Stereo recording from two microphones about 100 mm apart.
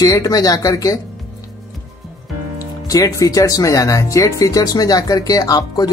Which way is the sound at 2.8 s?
35° left (ahead or behind).